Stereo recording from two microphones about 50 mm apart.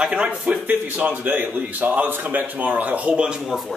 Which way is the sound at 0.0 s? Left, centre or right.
Right.